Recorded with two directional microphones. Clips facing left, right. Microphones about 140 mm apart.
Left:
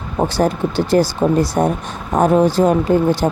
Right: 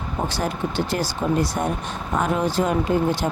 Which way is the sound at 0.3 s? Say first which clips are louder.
Left 9 dB; 35° left (ahead or behind).